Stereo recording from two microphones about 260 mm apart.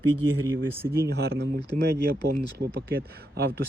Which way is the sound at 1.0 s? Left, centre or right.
Right.